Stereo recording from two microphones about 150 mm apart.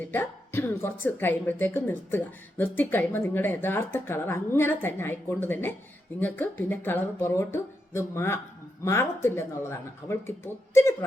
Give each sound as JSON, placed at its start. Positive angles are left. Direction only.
{"t": 0.1, "sound": "a woman's voice", "side_deg": 15}